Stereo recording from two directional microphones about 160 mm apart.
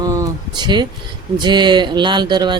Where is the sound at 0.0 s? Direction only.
20° right (ahead or behind).